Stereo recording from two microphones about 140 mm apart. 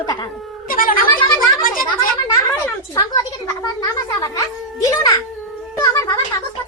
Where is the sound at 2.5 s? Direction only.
20° left (ahead or behind).